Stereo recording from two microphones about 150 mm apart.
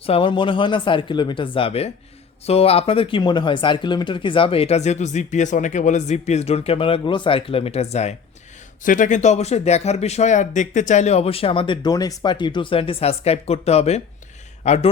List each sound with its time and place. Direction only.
0.0 s speech: 35° left (ahead or behind)
8.8 s a man's voice: 60° left (ahead or behind)